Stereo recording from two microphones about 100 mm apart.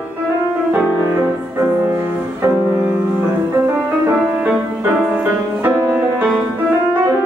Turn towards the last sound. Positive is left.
turn(degrees=-15)  # may be behind; listen again after turning